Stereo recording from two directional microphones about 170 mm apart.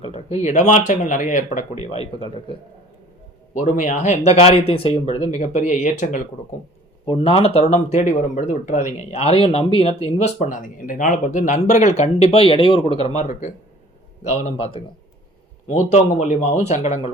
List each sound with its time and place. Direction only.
0.0 s speech: 35° left (ahead or behind)
3.5 s speech: 50° left (ahead or behind)
5.4 s speech: 45° left (ahead or behind)
7.0 s speech: 30° left (ahead or behind)